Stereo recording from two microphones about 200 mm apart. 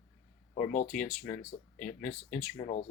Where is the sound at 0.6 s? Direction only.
45° left (ahead or behind).